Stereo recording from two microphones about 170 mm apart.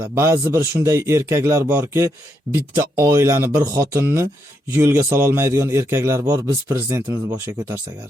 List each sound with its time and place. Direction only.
0.1 s a man's voice: 15° right (ahead or behind)